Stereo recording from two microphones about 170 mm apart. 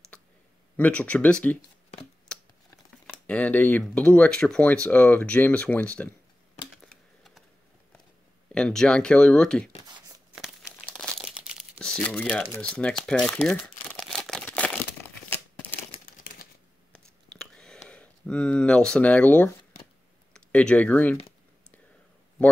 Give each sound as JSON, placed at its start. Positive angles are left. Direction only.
{"t": 0.1, "sound": "a sound", "side_deg": 10}
{"t": 0.7, "sound": "speech", "side_deg": 10}
{"t": 2.3, "sound": "computer keyboard", "side_deg": 5}
{"t": 3.3, "sound": "speech", "side_deg": 10}
{"t": 6.8, "sound": "a sound", "side_deg": 0}
{"t": 8.5, "sound": "speech", "side_deg": 5}
{"t": 9.8, "sound": "a sound", "side_deg": -25}
{"t": 10.9, "sound": "crumpling", "side_deg": 5}
{"t": 11.8, "sound": "speech", "side_deg": 5}
{"t": 12.3, "sound": "crumpling", "side_deg": 5}
{"t": 16.9, "sound": "a sound", "side_deg": 5}
{"t": 20.3, "sound": "speech", "side_deg": 5}